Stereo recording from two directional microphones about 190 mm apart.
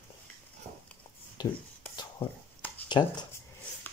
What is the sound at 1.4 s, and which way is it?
Speech, 20° left (ahead or behind).